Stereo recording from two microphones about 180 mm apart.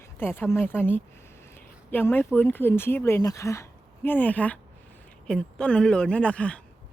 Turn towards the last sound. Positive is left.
turn(degrees=5)  # may be behind; listen again after turning